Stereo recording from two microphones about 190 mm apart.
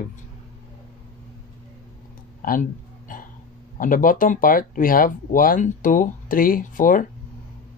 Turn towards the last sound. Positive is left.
turn(degrees=45)  # may be behind; listen again after turning